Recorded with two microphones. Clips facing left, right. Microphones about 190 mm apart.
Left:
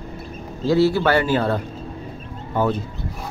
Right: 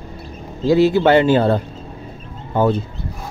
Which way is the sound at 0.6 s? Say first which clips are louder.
Right 4 dB; 15° right (ahead or behind).